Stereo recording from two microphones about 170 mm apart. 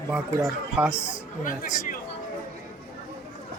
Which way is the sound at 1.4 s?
55° left (ahead or behind).